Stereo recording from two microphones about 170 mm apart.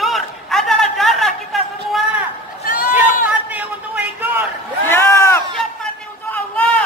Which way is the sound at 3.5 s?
10° right (ahead or behind).